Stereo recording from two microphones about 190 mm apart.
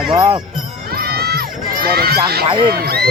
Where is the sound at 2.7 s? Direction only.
55° right (ahead or behind).